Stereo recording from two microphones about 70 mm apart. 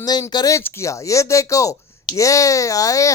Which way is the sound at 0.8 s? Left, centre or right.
Left.